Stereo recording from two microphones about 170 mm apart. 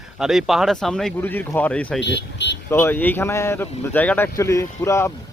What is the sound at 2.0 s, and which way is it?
Vehicle, 90° left.